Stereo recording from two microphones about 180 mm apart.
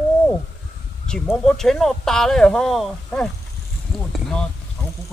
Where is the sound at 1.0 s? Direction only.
5° left (ahead or behind).